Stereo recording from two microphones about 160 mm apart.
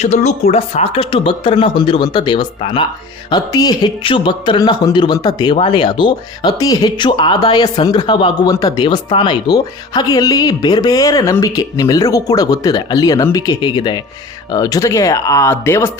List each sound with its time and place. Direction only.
0.0 s speech: 45° left (ahead or behind); by 15.9 s 15° left (ahead or behind)